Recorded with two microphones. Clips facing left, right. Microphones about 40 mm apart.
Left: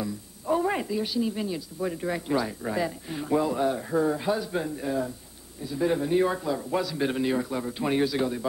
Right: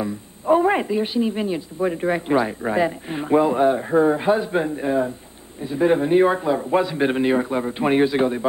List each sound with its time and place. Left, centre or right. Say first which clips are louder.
0.0 s speech: right 7 dB; right